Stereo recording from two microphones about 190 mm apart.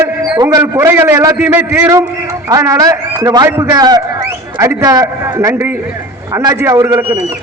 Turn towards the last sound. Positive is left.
turn(degrees=-15)  # may be behind; listen again after turning